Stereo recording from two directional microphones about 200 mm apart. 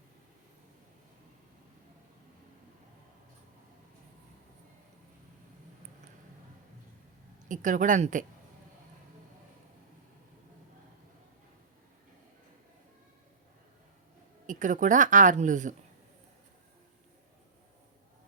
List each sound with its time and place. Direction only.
7.4 s a woman's voice: 40° right (ahead or behind)
14.4 s a woman's voice: 40° right (ahead or behind)